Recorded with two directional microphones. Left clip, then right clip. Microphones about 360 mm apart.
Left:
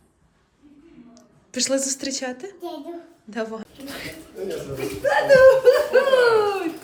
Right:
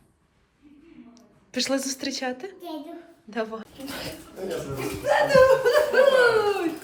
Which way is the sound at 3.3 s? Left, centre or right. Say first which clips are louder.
Left 1 dB; centre.